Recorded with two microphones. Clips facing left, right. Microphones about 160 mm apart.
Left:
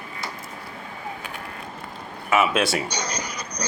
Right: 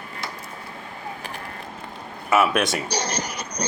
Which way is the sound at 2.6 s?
5° left (ahead or behind).